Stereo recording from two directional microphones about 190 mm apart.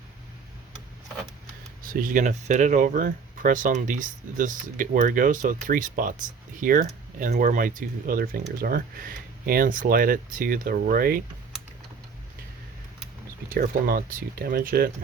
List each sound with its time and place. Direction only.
1.8 s speech: 45° right (ahead or behind)
13.5 s speech: 50° right (ahead or behind)